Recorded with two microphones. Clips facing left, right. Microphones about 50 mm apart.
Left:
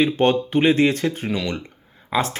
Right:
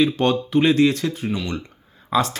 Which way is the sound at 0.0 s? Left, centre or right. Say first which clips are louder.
Left 1 dB; left.